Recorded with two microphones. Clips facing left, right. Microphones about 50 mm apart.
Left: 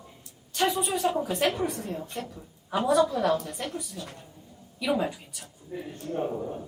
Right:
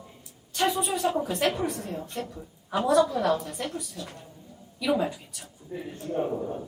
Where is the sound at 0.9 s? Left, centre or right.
Centre.